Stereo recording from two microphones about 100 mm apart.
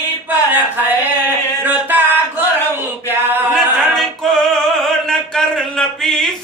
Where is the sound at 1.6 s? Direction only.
20° right (ahead or behind).